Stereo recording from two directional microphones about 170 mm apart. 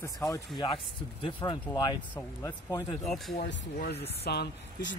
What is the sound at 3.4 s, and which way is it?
Speech, 70° left (ahead or behind).